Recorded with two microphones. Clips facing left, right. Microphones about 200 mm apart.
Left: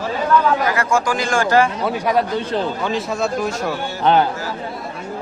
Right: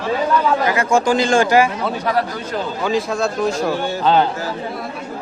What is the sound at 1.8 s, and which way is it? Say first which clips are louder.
Speech: left 1 dB; 10° left (ahead or behind).